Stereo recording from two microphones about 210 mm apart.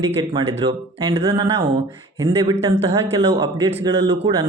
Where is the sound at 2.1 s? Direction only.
15° right (ahead or behind).